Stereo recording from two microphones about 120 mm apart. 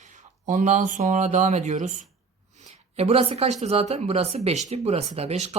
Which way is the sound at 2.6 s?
60° right (ahead or behind).